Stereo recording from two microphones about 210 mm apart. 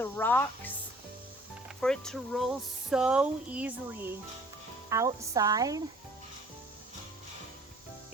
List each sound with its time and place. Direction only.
0.0 s speech: 10° left (ahead or behind); by 5.8 s 15° right (ahead or behind)